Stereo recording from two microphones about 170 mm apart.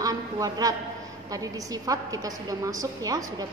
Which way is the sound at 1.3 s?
20° right (ahead or behind).